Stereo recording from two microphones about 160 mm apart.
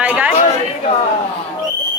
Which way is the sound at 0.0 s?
10° right (ahead or behind).